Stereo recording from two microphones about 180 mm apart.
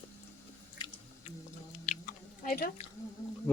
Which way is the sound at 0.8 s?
25° left (ahead or behind).